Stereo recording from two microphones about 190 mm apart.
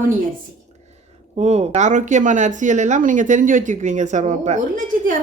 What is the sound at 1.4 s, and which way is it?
Speech, 35° right (ahead or behind).